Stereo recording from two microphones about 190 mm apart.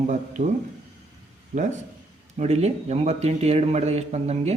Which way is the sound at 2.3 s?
35° right (ahead or behind).